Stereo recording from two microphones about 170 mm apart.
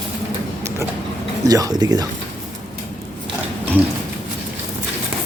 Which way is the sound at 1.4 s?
20° right (ahead or behind).